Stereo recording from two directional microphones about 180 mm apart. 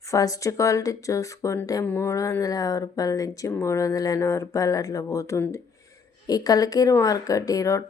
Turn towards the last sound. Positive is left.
turn(degrees=15)  # may be behind; listen again after turning